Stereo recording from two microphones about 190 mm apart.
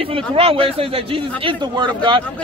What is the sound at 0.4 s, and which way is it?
A man's voice, 30° right (ahead or behind).